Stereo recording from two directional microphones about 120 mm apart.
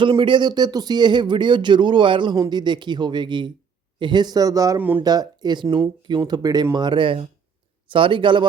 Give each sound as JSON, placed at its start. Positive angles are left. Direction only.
{"t": 0.0, "sound": "speech", "side_deg": -45}
{"t": 4.8, "sound": "speech", "side_deg": -15}
{"t": 5.0, "sound": "speech", "side_deg": -35}